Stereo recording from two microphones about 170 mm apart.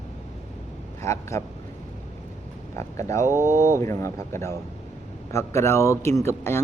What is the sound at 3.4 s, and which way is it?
Speech, 45° right (ahead or behind).